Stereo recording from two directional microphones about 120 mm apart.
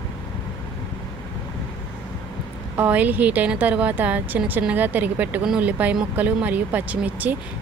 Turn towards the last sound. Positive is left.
turn(degrees=-15)  # may be behind; listen again after turning